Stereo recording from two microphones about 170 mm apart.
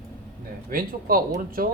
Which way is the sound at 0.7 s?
60° right (ahead or behind).